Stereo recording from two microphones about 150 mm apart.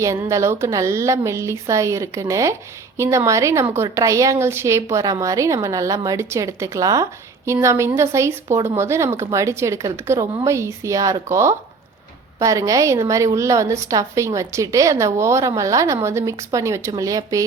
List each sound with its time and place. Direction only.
0.0 s a woman's voice: 20° right (ahead or behind)